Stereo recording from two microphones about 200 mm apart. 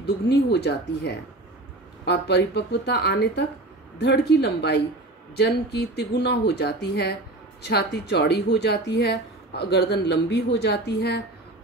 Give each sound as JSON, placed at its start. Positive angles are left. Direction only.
{"t": 0.3, "sound": "speech", "side_deg": 55}